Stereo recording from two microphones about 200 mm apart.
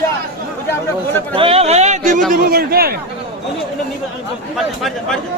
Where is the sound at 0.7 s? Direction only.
10° left (ahead or behind).